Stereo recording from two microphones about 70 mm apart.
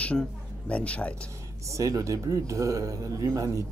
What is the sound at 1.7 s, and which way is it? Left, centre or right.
Speech, right.